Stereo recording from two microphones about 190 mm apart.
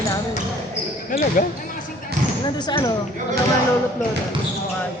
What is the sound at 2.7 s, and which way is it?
Speech, 20° left (ahead or behind).